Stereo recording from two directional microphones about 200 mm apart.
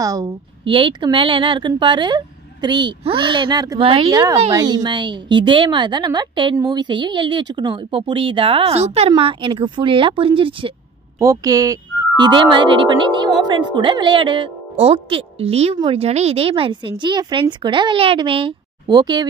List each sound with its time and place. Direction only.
0.0 s a woman's voice: 15° right (ahead or behind)